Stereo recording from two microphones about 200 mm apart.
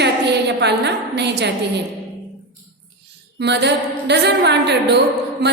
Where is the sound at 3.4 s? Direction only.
55° right (ahead or behind).